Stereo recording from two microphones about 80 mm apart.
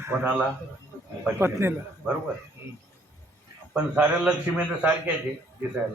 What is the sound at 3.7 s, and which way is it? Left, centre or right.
A man's voice, centre.